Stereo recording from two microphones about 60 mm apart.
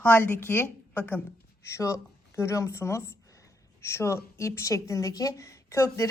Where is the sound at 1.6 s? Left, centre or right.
Left.